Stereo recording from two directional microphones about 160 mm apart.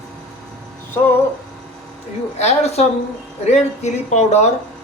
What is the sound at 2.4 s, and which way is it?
Speech, 45° left (ahead or behind).